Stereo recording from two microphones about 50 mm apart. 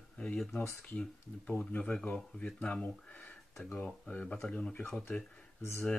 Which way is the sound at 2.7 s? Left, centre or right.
Left.